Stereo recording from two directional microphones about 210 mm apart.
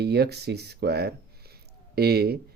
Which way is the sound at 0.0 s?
50° right (ahead or behind).